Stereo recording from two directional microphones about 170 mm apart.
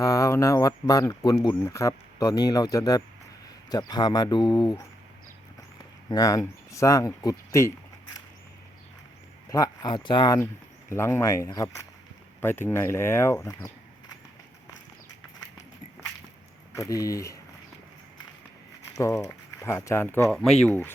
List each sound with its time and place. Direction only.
0.0 s speech: 20° left (ahead or behind)
6.1 s speech: 20° left (ahead or behind)
9.5 s speech: 20° left (ahead or behind)
16.7 s speech: 20° left (ahead or behind)
18.9 s speech: 20° left (ahead or behind)
20.3 s speech: 5° left (ahead or behind)